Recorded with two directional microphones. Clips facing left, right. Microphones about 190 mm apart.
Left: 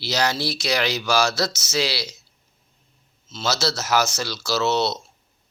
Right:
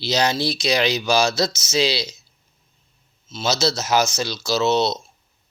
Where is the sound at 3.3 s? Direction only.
15° right (ahead or behind).